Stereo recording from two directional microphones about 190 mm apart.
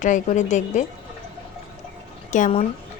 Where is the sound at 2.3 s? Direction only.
40° left (ahead or behind).